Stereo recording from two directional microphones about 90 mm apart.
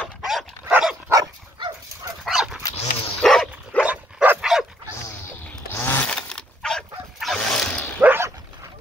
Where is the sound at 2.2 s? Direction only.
5° right (ahead or behind).